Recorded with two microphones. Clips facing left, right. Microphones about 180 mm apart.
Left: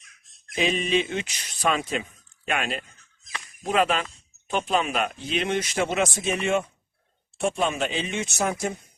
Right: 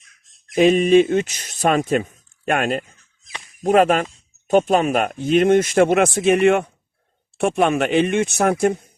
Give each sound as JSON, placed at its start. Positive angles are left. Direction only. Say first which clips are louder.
{"t": 0.5, "sound": "speech", "louder": "right 11 dB", "side_deg": -50}